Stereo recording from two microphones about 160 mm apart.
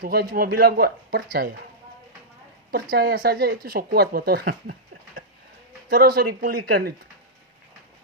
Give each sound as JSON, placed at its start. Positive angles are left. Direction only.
{"t": 0.0, "sound": "speech", "side_deg": -70}
{"t": 2.9, "sound": "speech", "side_deg": -70}
{"t": 5.9, "sound": "speech", "side_deg": -70}